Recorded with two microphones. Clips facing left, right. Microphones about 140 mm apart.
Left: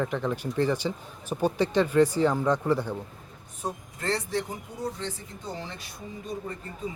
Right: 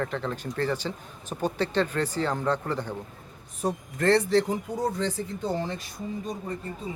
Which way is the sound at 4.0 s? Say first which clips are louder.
Right 8 dB; 65° right (ahead or behind).